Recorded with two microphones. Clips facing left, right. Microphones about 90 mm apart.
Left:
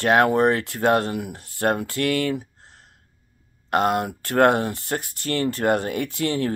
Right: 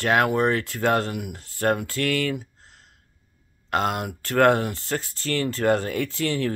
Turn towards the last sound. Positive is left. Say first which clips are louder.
# left 1 dB
turn(degrees=20)  # may be behind; listen again after turning